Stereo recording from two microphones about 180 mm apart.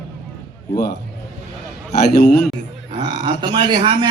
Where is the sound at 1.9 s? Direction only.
60° left (ahead or behind).